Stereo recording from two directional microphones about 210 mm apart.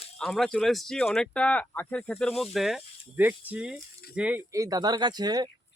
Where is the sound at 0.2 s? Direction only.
Centre (ahead or behind).